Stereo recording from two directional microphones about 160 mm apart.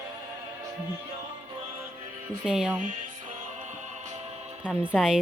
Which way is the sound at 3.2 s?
50° right (ahead or behind).